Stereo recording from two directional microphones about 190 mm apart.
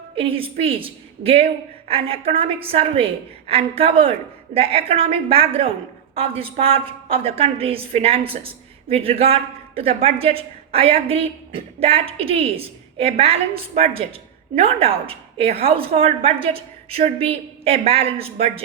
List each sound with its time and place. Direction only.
0.2 s a woman's voice: 30° right (ahead or behind)